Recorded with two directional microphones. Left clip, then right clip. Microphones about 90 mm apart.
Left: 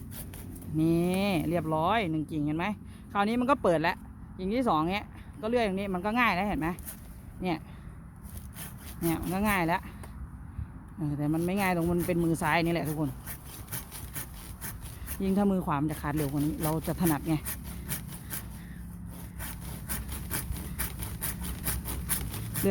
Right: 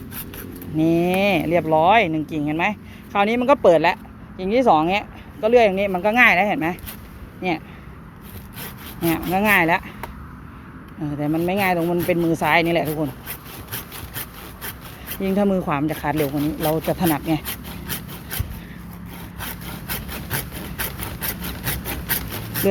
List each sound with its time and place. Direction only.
0.8 s speech: 25° left (ahead or behind)
7.4 s speech: 35° left (ahead or behind)
9.1 s speech: 10° left (ahead or behind)
11.0 s speech: 35° left (ahead or behind)
15.2 s speech: 25° left (ahead or behind)
16.1 s speech: 30° left (ahead or behind)